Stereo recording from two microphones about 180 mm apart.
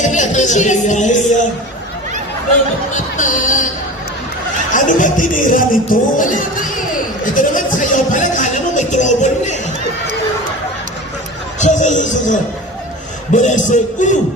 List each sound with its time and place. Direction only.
0.0 s speech: 45° left (ahead or behind)
2.9 s a man's voice: 45° left (ahead or behind)
4.7 s a man's voice: 45° left (ahead or behind)
11.6 s a man's voice: 40° left (ahead or behind)